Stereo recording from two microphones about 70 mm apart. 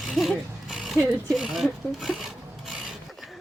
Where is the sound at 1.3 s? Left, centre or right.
Centre.